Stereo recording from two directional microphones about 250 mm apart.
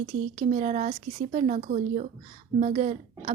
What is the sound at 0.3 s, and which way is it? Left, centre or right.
Speech, right.